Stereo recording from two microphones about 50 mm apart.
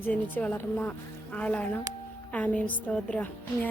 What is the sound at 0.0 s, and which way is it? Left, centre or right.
Speech, left.